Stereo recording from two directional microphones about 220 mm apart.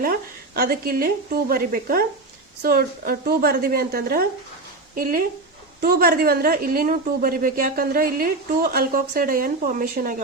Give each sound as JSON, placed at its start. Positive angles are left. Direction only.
{"t": 0.0, "sound": "a woman's voice", "side_deg": -45}
{"t": 5.8, "sound": "a woman's voice", "side_deg": -45}